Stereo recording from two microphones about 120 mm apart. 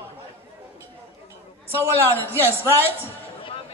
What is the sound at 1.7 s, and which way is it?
A woman's voice, 20° right (ahead or behind).